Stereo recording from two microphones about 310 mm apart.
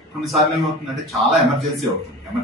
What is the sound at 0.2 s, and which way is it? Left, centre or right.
Speech, centre.